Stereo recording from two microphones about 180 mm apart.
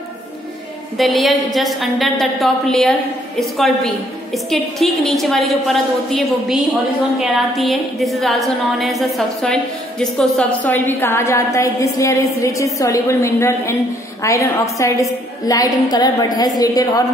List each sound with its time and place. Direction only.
0.9 s a woman's voice: centre (ahead or behind); by 17.0 s 20° left (ahead or behind)